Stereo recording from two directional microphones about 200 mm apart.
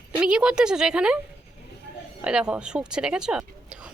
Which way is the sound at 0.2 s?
5° right (ahead or behind).